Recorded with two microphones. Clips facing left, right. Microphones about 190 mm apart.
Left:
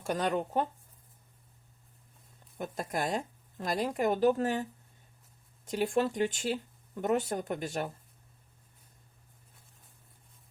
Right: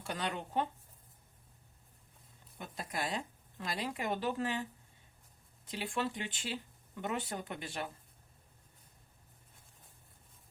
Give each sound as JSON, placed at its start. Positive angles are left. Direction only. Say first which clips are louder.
{"t": 0.0, "sound": "speech", "louder": "left 8 dB", "side_deg": 45}
{"t": 2.6, "sound": "speech", "louder": "left 6 dB", "side_deg": 45}
{"t": 5.6, "sound": "speech", "louder": "left 8 dB", "side_deg": 45}